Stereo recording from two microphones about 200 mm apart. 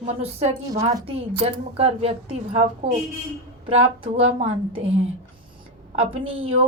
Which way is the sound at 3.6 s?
30° right (ahead or behind).